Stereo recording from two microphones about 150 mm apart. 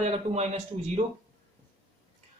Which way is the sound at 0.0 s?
45° right (ahead or behind).